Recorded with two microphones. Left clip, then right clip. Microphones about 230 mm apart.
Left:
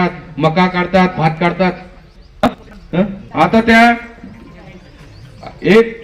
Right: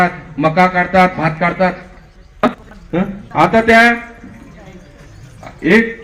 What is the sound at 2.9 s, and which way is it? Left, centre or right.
A man's voice, left.